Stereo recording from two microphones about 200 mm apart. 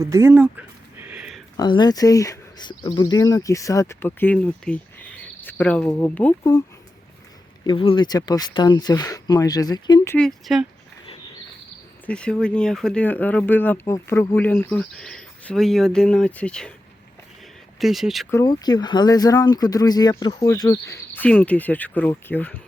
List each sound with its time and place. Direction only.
0.0 s a sound: 15° right (ahead or behind)
1.5 s speech: 20° left (ahead or behind)
7.6 s speech: 25° left (ahead or behind)
10.2 s speech: centre (ahead or behind)
12.0 s speech: 5° left (ahead or behind)
17.7 s speech: centre (ahead or behind)
18.3 s speech: 15° left (ahead or behind)